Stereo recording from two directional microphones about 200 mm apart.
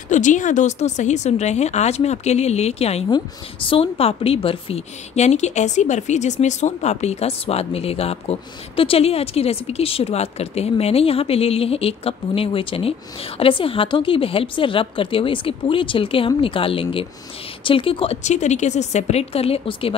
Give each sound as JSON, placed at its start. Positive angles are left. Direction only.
{"t": 0.1, "sound": "a woman's voice", "side_deg": 40}